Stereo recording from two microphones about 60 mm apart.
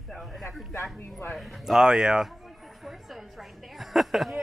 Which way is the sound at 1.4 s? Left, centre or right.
Centre.